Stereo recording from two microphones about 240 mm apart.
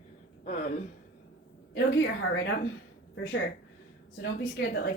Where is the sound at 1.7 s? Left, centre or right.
Left.